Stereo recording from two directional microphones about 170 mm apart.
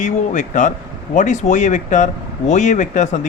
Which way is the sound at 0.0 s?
45° left (ahead or behind).